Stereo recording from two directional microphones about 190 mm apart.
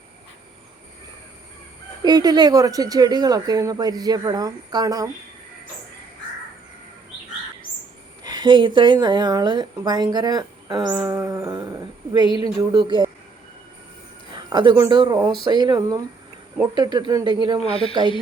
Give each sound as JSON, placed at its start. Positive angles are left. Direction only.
{"t": 2.0, "sound": "speech", "side_deg": -20}
{"t": 8.2, "sound": "speech", "side_deg": -25}
{"t": 10.9, "sound": "a sound", "side_deg": -15}
{"t": 12.5, "sound": "speech", "side_deg": -25}
{"t": 14.5, "sound": "speech", "side_deg": -25}
{"t": 17.7, "sound": "speech", "side_deg": 30}